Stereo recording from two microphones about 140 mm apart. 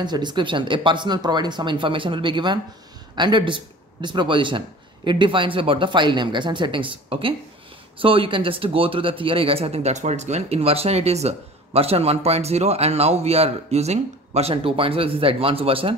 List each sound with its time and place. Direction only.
0.0 s speech: 30° right (ahead or behind)